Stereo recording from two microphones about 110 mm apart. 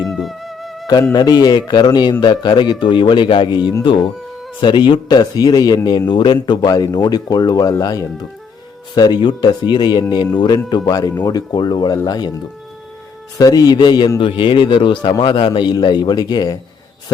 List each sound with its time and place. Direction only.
0.0 s music: centre (ahead or behind)
1.1 s a man's voice: 40° left (ahead or behind)
13.4 s a man's voice: 35° left (ahead or behind)